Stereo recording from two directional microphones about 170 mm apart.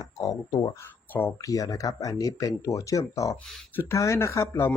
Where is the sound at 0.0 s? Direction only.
20° left (ahead or behind).